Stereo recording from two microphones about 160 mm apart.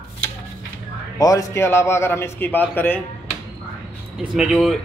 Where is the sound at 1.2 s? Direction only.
20° left (ahead or behind).